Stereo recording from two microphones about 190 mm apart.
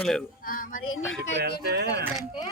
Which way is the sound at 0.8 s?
90° left.